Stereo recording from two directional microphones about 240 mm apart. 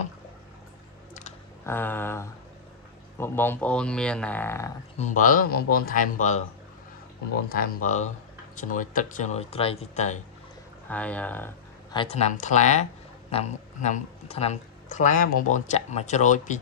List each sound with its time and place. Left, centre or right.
1.7 s speech: centre
4.9 s speech: left
7.4 s speech: left
10.9 s speech: centre
11.9 s speech: left